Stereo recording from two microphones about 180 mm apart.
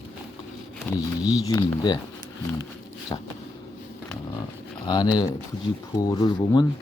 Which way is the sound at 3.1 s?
30° left (ahead or behind).